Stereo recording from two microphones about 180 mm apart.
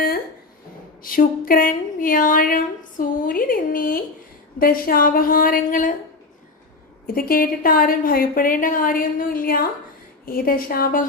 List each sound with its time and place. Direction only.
1.0 s a woman's voice: 50° left (ahead or behind)
7.1 s a woman's voice: 55° left (ahead or behind)